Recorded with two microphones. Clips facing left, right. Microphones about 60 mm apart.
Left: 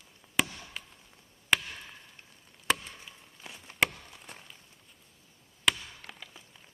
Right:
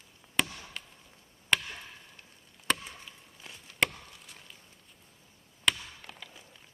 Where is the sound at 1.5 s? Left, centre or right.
Centre.